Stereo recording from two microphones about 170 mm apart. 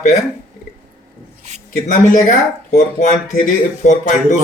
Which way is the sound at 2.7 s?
50° left (ahead or behind).